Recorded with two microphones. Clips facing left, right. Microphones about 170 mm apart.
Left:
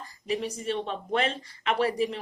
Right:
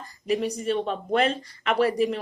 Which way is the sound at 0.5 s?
45° right (ahead or behind).